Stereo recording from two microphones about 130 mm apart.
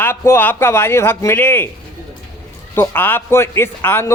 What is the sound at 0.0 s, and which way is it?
A man's voice, 20° left (ahead or behind).